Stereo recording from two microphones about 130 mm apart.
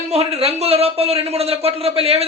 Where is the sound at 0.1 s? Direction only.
50° right (ahead or behind).